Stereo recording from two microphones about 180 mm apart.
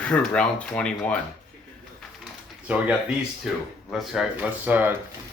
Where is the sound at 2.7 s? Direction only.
5° right (ahead or behind).